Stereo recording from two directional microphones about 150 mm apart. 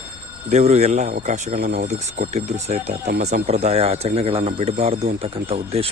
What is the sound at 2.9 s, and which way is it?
Speech, 90° right.